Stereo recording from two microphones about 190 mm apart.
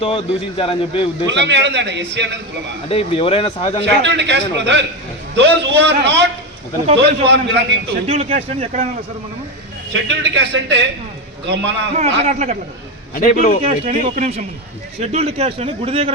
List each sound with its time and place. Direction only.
0.0 s a man's voice: 30° left (ahead or behind)
1.3 s a man's voice: 65° right (ahead or behind)
2.9 s a man's voice: 30° left (ahead or behind)
4.0 s a man's voice: 65° right (ahead or behind)
8.0 s speech: 35° right (ahead or behind)
9.9 s a man's voice: 70° right (ahead or behind)
11.9 s speech: 40° right (ahead or behind)
13.1 s a man's voice: 45° left (ahead or behind)
13.7 s speech: 35° right (ahead or behind)